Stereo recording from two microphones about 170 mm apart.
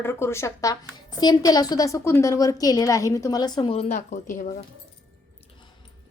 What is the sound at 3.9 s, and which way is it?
Speech, 50° left (ahead or behind).